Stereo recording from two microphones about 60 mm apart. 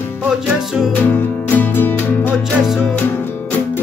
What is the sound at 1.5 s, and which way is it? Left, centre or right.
Music, left.